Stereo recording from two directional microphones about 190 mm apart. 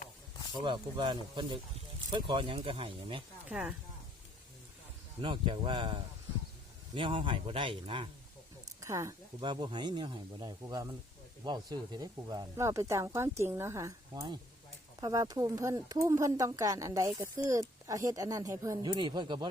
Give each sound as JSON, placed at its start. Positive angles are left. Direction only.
{"t": 0.6, "sound": "a man's voice", "side_deg": -25}
{"t": 3.5, "sound": "speech", "side_deg": -5}
{"t": 5.2, "sound": "a man's voice", "side_deg": -25}
{"t": 8.8, "sound": "a man's voice", "side_deg": -15}